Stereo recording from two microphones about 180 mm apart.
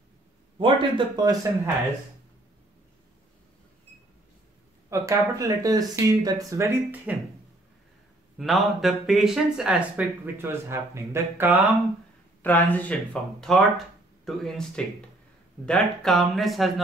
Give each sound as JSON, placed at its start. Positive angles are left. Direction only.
{"t": 0.6, "sound": "speech", "side_deg": -25}
{"t": 4.8, "sound": "a sound", "side_deg": -15}
{"t": 5.4, "sound": "speech", "side_deg": -20}
{"t": 8.4, "sound": "speech", "side_deg": 0}
{"t": 12.4, "sound": "speech", "side_deg": 10}